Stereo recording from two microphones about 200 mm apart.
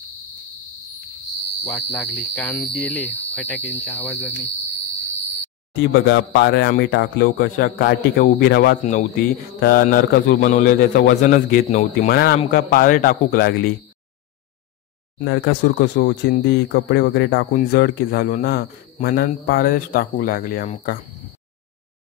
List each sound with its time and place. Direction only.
1.7 s cricket: 5° left (ahead or behind)
5.8 s a man's voice: 60° left (ahead or behind); by 12.1 s 40° left (ahead or behind)
12.1 s a man's voice: 50° left (ahead or behind)
15.2 s a man's voice: 60° left (ahead or behind); by 21.0 s 40° left (ahead or behind)